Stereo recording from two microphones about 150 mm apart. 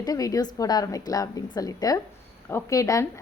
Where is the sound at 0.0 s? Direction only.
25° left (ahead or behind).